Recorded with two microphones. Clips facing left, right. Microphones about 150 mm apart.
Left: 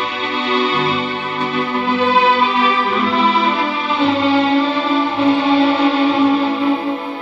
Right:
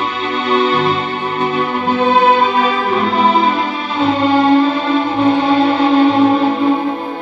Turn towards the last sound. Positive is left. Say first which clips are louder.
# right 2 dB
turn(degrees=-40)  # may be behind; listen again after turning